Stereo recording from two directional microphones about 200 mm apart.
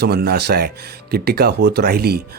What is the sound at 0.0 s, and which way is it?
Speech, 55° right (ahead or behind).